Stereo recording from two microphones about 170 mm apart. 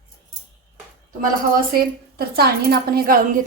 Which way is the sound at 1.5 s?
65° right (ahead or behind).